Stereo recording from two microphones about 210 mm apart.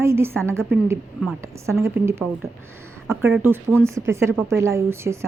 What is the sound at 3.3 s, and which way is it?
Speech, 10° right (ahead or behind).